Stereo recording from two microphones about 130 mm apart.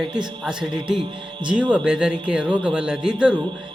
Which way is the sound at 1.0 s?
40° right (ahead or behind).